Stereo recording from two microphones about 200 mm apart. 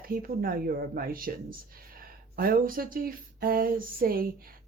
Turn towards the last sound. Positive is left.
turn(degrees=-45)  # may be behind; listen again after turning